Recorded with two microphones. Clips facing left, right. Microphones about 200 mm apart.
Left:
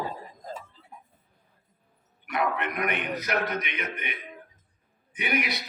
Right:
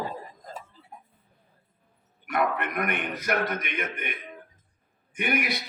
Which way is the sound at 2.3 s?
50° right (ahead or behind).